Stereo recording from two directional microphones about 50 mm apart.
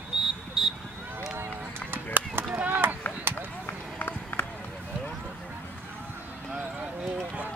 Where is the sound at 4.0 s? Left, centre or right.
Left.